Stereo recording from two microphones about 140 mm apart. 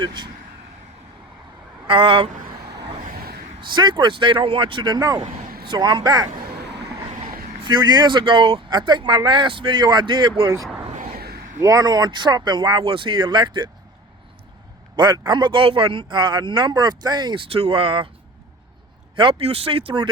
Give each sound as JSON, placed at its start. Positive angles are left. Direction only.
{"t": 0.0, "sound": "speech", "side_deg": -35}
{"t": 1.9, "sound": "speech", "side_deg": -40}
{"t": 3.6, "sound": "speech", "side_deg": -35}
{"t": 7.3, "sound": "vehicle", "side_deg": -90}
{"t": 7.6, "sound": "speech", "side_deg": -35}
{"t": 10.9, "sound": "a sound", "side_deg": -75}
{"t": 11.6, "sound": "speech", "side_deg": -25}
{"t": 14.9, "sound": "a man's voice", "side_deg": -30}
{"t": 19.1, "sound": "speech", "side_deg": -40}